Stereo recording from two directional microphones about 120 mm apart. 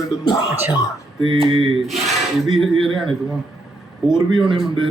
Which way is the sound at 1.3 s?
50° right (ahead or behind).